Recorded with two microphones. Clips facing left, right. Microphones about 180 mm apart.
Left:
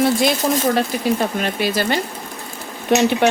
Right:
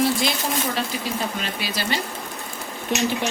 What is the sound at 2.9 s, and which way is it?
Speech, 65° left (ahead or behind).